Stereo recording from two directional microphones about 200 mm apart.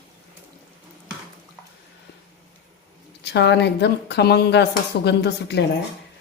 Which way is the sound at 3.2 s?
60° left (ahead or behind).